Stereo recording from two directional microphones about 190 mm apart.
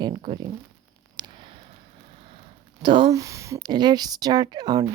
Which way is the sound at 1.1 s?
25° right (ahead or behind).